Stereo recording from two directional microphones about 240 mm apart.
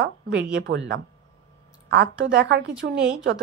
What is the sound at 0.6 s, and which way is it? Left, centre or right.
A woman's voice, right.